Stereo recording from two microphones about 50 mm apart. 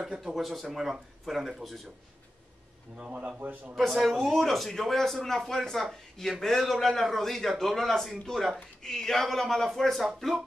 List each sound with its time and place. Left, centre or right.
0.2 s a man's voice: centre
3.0 s a man's voice: right
3.3 s a man's voice: right
3.7 s a man's voice: centre
10.0 s speech: centre